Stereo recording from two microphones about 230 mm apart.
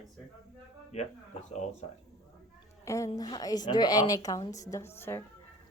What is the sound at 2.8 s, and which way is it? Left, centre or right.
A woman's voice, centre.